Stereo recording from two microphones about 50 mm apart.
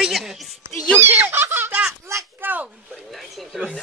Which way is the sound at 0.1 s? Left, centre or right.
Centre.